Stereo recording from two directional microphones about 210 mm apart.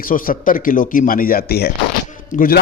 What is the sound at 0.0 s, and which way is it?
A man's voice, 40° left (ahead or behind).